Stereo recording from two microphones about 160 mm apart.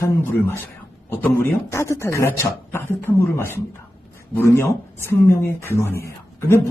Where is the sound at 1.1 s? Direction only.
15° left (ahead or behind).